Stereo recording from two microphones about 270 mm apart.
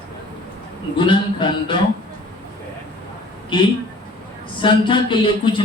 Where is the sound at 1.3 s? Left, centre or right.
Centre.